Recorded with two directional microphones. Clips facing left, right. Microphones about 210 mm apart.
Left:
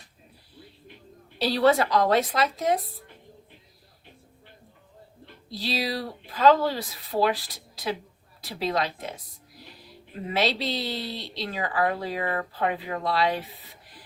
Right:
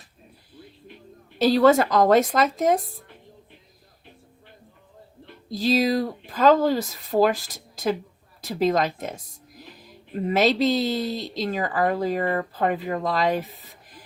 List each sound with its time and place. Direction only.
1.4 s speech: 45° right (ahead or behind)
5.5 s speech: 45° right (ahead or behind)
10.2 s speech: 45° right (ahead or behind)